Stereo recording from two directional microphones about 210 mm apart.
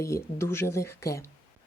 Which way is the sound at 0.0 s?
15° left (ahead or behind).